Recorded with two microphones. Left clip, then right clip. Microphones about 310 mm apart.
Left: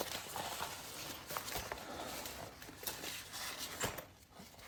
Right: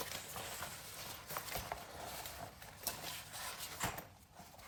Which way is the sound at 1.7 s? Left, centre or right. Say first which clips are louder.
Even; centre.